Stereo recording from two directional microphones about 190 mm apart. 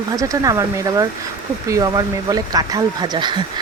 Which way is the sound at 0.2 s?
15° right (ahead or behind).